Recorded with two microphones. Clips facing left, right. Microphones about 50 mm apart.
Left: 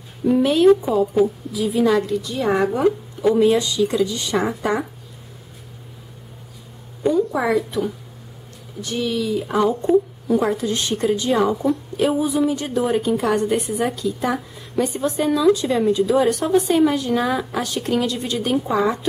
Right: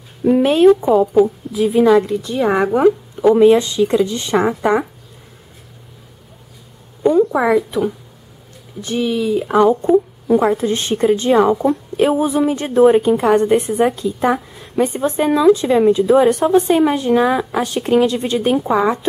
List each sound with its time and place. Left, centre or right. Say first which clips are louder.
0.4 s a woman's voice: right 3 dB; right
7.0 s a sound: right 5 dB; right
7.3 s a woman's voice: right 5 dB; centre